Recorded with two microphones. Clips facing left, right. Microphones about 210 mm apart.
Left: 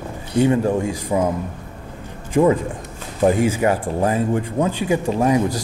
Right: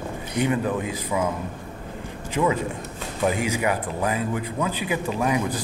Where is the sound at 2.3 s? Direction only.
50° left (ahead or behind).